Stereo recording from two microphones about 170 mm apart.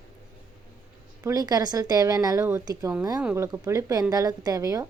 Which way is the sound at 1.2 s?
20° right (ahead or behind).